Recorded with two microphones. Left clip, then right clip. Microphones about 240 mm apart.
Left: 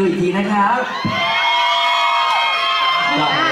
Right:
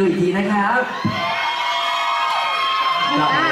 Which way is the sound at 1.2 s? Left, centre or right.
Centre.